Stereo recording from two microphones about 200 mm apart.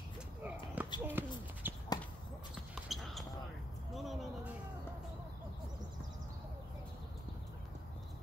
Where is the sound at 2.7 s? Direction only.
Centre (ahead or behind).